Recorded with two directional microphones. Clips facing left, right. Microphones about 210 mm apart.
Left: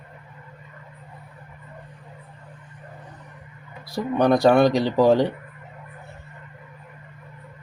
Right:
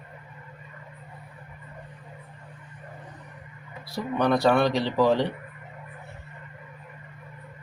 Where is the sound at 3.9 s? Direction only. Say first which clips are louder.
Left 5 dB; 40° left (ahead or behind).